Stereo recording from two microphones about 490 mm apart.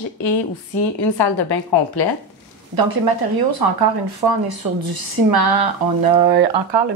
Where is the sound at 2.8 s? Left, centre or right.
Right.